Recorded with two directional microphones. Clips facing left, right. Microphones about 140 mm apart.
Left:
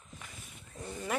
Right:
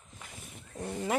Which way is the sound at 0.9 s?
20° right (ahead or behind).